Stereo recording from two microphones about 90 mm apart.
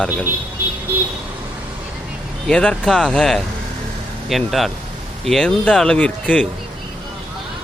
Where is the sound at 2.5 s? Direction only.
10° left (ahead or behind).